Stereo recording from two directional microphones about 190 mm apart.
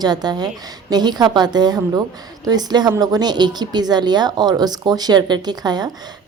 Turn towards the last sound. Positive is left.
turn(degrees=-20)  # may be behind; listen again after turning